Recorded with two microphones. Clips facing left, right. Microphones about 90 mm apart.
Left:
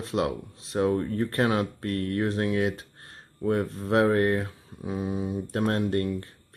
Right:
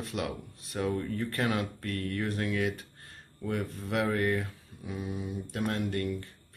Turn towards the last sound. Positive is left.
turn(degrees=35)  # may be behind; listen again after turning